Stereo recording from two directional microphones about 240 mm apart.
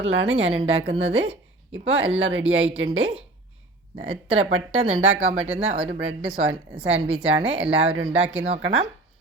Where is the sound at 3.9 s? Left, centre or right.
Right.